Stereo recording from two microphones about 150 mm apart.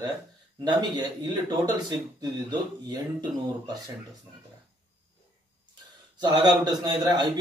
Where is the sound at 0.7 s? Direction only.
25° right (ahead or behind).